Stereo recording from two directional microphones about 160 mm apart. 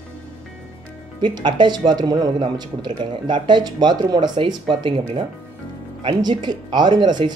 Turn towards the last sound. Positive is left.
turn(degrees=-25)  # may be behind; listen again after turning